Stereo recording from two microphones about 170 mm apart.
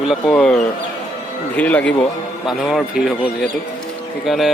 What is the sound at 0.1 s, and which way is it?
A man's voice, 5° left (ahead or behind).